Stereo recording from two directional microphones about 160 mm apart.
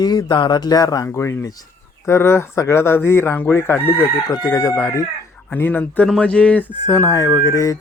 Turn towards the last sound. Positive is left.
turn(degrees=20)  # may be behind; listen again after turning